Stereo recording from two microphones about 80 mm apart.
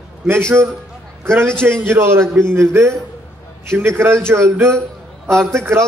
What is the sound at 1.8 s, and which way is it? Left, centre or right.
A man's voice, right.